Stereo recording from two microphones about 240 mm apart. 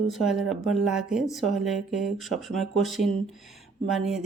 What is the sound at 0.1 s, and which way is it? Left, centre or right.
A woman's voice, centre.